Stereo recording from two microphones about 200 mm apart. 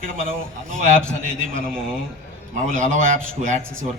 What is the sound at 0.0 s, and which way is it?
Speech, 45° right (ahead or behind).